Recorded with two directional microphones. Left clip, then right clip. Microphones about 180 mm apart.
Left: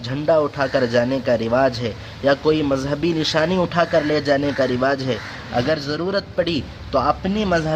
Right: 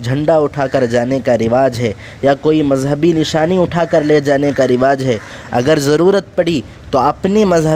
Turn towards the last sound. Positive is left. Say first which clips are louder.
# right 9 dB
turn(degrees=-55)  # may be behind; listen again after turning